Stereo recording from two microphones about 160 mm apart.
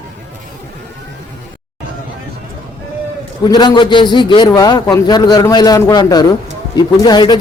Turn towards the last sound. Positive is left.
turn(degrees=25)  # may be behind; listen again after turning